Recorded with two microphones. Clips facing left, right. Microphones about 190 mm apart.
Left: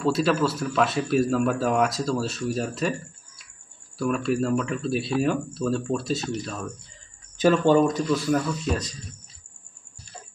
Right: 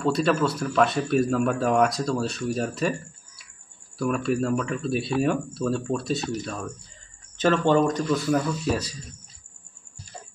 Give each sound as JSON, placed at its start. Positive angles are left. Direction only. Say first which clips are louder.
{"t": 0.0, "sound": "a man's voice", "louder": "even", "side_deg": 0}
{"t": 4.0, "sound": "a man's voice", "louder": "even", "side_deg": 0}
{"t": 7.3, "sound": "speech", "louder": "left 2 dB", "side_deg": 10}